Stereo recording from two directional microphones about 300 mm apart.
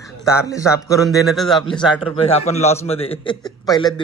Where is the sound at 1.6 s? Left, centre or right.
Centre.